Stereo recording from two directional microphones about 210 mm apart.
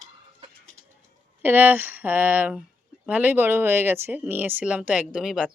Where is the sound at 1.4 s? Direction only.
10° right (ahead or behind).